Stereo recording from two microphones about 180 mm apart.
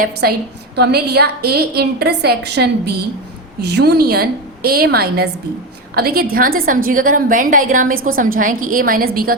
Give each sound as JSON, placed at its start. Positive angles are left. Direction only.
{"t": 0.0, "sound": "a woman's voice", "side_deg": -55}